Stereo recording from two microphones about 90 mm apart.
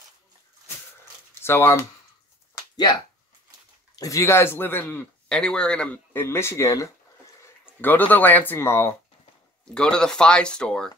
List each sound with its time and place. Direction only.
1.4 s speech: 25° left (ahead or behind)
3.9 s a sound: 40° left (ahead or behind)
4.2 s speech: 25° left (ahead or behind)
5.3 s speech: 10° left (ahead or behind)
6.1 s speech: 25° left (ahead or behind)
7.8 s speech: 20° left (ahead or behind)
9.8 s speech: 10° left (ahead or behind)